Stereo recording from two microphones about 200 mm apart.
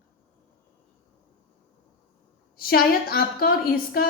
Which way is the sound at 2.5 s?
50° left (ahead or behind).